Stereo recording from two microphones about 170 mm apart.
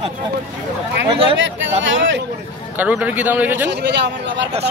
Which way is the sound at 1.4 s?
90° right.